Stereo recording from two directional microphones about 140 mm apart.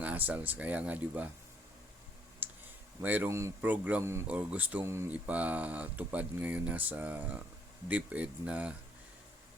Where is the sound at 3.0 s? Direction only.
10° right (ahead or behind).